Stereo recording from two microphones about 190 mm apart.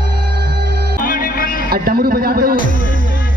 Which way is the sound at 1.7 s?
55° right (ahead or behind).